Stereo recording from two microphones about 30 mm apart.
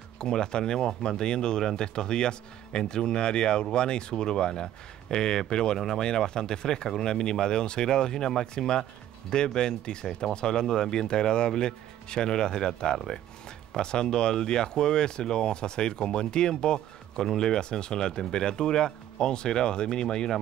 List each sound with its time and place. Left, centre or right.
0.2 s speech: left